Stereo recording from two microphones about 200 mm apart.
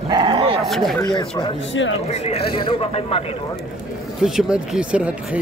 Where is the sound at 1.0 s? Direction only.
20° left (ahead or behind).